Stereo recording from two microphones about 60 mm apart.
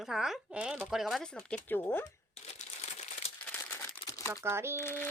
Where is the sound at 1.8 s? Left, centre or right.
Left.